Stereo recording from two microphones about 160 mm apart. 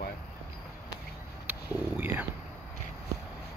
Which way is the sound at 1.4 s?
10° right (ahead or behind).